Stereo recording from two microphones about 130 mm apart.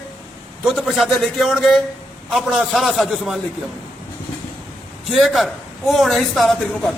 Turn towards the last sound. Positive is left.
turn(degrees=0)  # may be behind; listen again after turning